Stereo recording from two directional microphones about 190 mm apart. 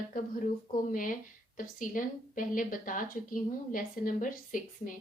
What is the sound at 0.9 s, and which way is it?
A woman's voice, 45° left (ahead or behind).